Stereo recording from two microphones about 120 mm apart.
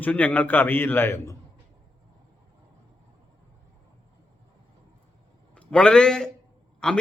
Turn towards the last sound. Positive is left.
turn(degrees=5)  # may be behind; listen again after turning